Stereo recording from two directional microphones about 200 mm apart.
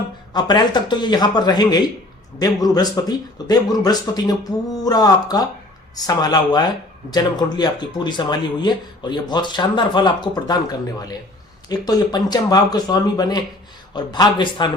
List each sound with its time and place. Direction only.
0.3 s speech: 20° left (ahead or behind)